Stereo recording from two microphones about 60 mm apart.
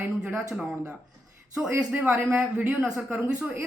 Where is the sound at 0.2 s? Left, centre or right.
Centre.